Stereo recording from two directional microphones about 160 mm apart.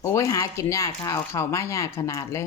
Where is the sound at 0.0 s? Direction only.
20° left (ahead or behind).